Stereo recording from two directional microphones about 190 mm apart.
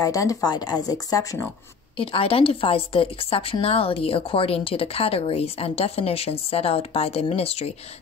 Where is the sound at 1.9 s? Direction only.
30° left (ahead or behind).